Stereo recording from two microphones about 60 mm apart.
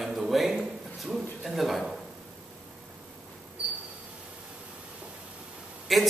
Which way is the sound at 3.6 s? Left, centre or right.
Centre.